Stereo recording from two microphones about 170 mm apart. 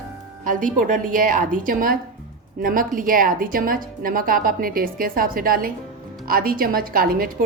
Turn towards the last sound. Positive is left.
turn(degrees=-60)  # may be behind; listen again after turning